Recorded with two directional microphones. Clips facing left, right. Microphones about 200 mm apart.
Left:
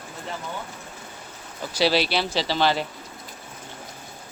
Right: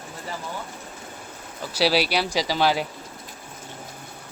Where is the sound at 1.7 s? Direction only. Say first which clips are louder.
Even; 5° right (ahead or behind).